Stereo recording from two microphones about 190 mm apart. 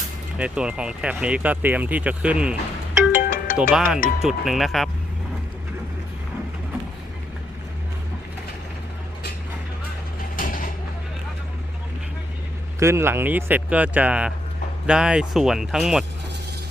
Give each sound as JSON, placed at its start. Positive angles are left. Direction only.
{"t": 0.3, "sound": "speech", "side_deg": -5}
{"t": 3.2, "sound": "music", "side_deg": 50}
{"t": 3.6, "sound": "speech", "side_deg": -5}
{"t": 10.3, "sound": "mechanisms", "side_deg": 45}
{"t": 12.8, "sound": "speech", "side_deg": -15}